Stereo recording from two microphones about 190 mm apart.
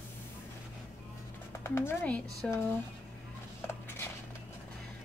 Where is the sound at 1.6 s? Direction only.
10° left (ahead or behind).